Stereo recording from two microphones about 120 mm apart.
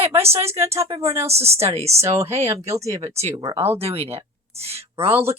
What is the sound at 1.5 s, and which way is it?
Speech, 60° right (ahead or behind).